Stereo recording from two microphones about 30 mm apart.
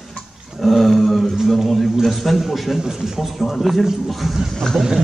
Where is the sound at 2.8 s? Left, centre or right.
Centre.